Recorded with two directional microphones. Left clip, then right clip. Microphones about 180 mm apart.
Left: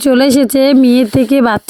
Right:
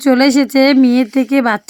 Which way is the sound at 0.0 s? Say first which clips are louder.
Left 2 dB; 25° left (ahead or behind).